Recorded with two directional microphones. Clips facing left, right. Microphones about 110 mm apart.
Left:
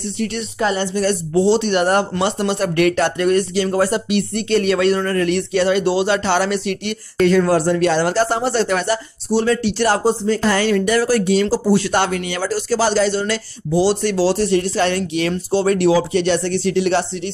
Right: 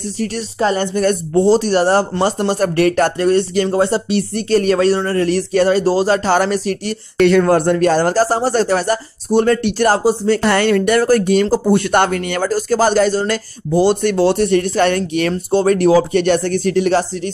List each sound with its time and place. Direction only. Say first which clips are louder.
0.2 s speech: right 2 dB; 35° right (ahead or behind)
0.9 s speech: right 2 dB; 50° right (ahead or behind)
7.2 s speech: right 3 dB; 70° right (ahead or behind)
7.4 s speech: right 3 dB; 50° right (ahead or behind)
10.2 s speech: right 3 dB; 65° right (ahead or behind); by 17.3 s 40° right (ahead or behind)